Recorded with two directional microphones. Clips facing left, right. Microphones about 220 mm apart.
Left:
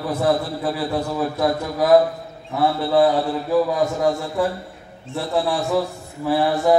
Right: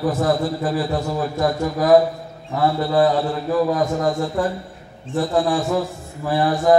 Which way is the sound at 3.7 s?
45° right (ahead or behind).